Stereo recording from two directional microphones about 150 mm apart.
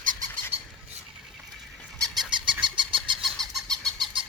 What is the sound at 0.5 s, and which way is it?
Squawk, 40° right (ahead or behind).